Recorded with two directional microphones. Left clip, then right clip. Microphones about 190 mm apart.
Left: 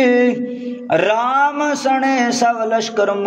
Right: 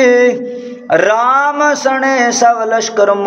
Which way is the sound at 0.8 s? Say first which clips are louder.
Right 5 dB; 35° left (ahead or behind).